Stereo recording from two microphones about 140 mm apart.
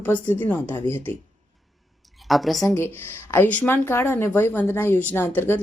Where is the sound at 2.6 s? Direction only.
15° left (ahead or behind).